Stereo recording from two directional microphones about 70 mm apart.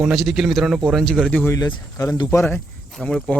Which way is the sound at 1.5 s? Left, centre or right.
Left.